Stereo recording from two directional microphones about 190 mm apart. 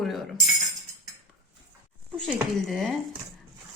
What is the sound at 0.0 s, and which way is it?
Tambourine, centre (ahead or behind).